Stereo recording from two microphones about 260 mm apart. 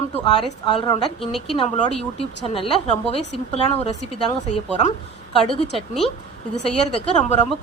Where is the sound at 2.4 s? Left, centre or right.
Left.